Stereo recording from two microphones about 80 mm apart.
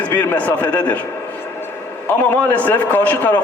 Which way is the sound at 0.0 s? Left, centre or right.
Left.